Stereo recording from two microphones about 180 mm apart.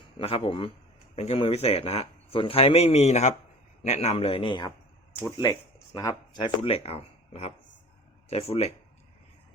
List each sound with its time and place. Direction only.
0.2 s speech: 30° left (ahead or behind)